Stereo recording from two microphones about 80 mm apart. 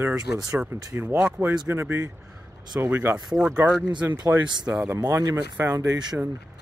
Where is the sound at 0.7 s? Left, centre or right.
Right; by 3.9 s centre.